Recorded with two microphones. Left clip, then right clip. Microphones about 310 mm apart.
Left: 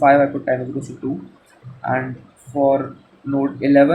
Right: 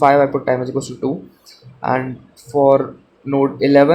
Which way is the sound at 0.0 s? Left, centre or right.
Centre.